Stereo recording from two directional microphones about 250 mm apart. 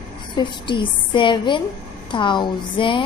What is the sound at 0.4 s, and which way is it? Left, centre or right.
A woman's voice, centre.